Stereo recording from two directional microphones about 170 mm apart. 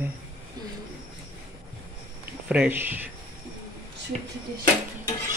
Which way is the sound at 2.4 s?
10° right (ahead or behind).